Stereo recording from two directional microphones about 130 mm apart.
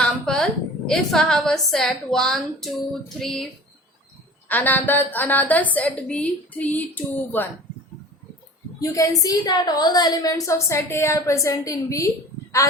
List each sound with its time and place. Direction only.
0.3 s a sound: 5° left (ahead or behind)
0.9 s a woman's voice: 5° left (ahead or behind)
4.4 s a woman's voice: 15° left (ahead or behind)
8.8 s a woman's voice: 25° left (ahead or behind)